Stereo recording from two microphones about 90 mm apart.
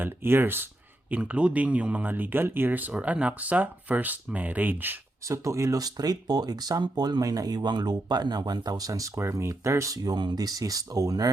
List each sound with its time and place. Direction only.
0.0 s speech: 25° right (ahead or behind)
5.2 s speech: 35° right (ahead or behind)